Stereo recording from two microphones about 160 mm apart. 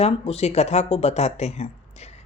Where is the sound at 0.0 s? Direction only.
40° left (ahead or behind).